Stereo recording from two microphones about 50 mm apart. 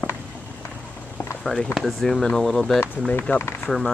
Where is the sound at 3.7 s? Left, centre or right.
Centre.